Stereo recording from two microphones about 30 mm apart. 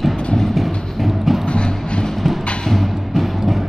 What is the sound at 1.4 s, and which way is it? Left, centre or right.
Music, left.